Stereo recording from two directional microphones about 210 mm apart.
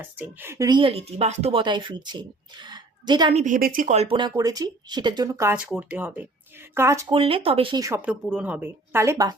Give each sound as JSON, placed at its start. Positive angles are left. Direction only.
{"t": 0.0, "sound": "speech", "side_deg": -10}
{"t": 3.4, "sound": "speech", "side_deg": -40}